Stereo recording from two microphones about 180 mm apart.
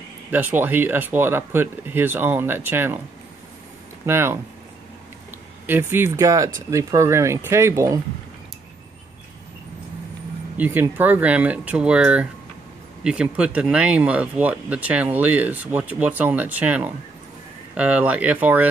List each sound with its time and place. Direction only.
0.3 s speech: 10° right (ahead or behind)
4.0 s speech: 15° right (ahead or behind)
5.7 s speech: 10° right (ahead or behind)
10.6 s speech: 10° right (ahead or behind)